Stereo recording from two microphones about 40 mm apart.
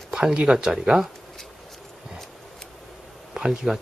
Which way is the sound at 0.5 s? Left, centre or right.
Centre.